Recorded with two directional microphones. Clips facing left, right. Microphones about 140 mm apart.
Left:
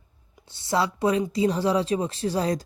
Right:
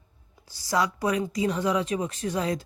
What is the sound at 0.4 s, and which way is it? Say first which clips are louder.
A woman's voice: left 1 dB; 25° left (ahead or behind).